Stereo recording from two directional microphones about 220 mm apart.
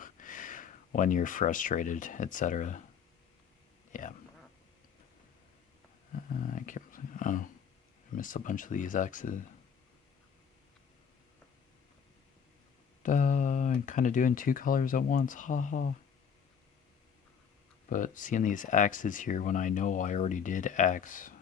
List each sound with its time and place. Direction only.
0.0 s speech: 35° left (ahead or behind)
3.9 s a sound: 35° left (ahead or behind)
6.3 s a sound: 35° left (ahead or behind)
8.1 s speech: 35° left (ahead or behind)
13.0 s speech: 35° left (ahead or behind)
17.8 s speech: 35° left (ahead or behind)